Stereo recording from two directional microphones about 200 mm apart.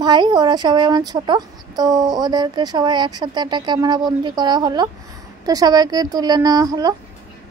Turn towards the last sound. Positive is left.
turn(degrees=-20)  # may be behind; listen again after turning